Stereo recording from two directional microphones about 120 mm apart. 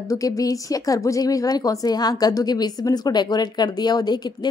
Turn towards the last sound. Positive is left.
turn(degrees=35)  # may be behind; listen again after turning